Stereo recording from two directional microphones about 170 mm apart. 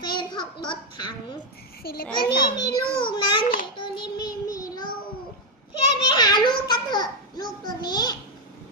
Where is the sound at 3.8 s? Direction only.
30° left (ahead or behind).